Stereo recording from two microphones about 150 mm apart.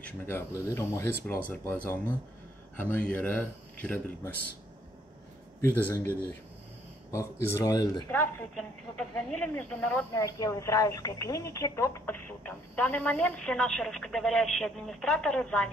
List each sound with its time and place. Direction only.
0.0 s speech: 15° left (ahead or behind)
5.6 s speech: 15° left (ahead or behind)
8.1 s speech: 10° left (ahead or behind)
10.1 s speech: 25° left (ahead or behind); by 15.7 s 5° left (ahead or behind)